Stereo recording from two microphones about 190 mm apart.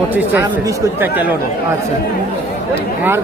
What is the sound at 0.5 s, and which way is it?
Speech, 15° right (ahead or behind).